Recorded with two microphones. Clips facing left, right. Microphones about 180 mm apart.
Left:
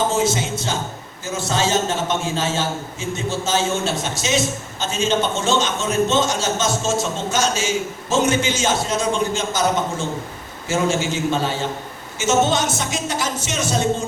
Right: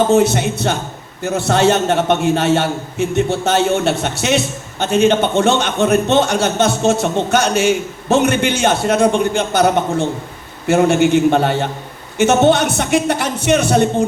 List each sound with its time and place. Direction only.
0.1 s a man's voice: 65° right (ahead or behind)